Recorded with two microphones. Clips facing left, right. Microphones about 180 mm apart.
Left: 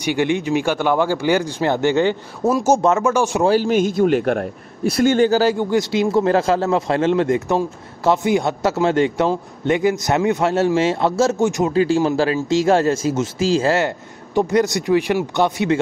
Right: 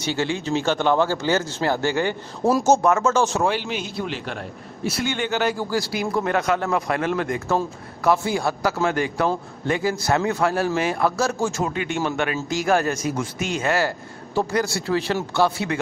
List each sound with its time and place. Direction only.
0.0 s speech: 15° left (ahead or behind)
2.4 s a man's voice: 5° left (ahead or behind)
2.8 s speech: 20° left (ahead or behind)
3.4 s a man's voice: 40° left (ahead or behind); by 11.7 s 20° left (ahead or behind)
11.7 s a man's voice: 35° left (ahead or behind)